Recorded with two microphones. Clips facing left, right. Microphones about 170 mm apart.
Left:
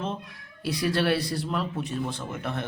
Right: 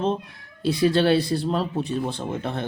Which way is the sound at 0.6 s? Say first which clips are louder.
Right 6 dB; 25° right (ahead or behind).